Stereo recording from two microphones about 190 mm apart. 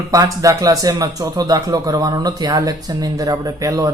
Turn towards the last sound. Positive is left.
turn(degrees=-15)  # may be behind; listen again after turning